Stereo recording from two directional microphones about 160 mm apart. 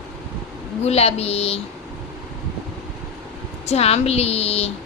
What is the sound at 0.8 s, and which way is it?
Speech, 40° left (ahead or behind).